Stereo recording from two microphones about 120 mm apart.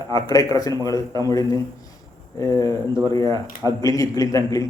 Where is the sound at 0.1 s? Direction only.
30° left (ahead or behind).